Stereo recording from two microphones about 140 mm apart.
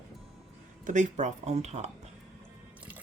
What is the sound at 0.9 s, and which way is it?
Speech, 60° right (ahead or behind).